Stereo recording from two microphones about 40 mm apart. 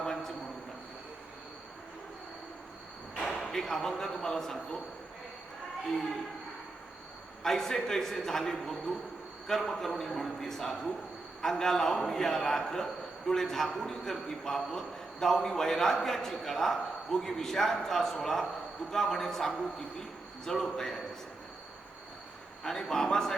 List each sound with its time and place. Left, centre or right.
0.0 s a sound: centre
3.2 s speech: centre
7.4 s a man's voice: centre
22.6 s a man's voice: centre